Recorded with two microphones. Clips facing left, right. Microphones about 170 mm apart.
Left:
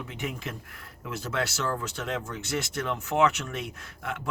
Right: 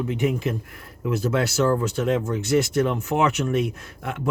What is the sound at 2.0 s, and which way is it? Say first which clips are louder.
Speech: right 10 dB; 20° right (ahead or behind).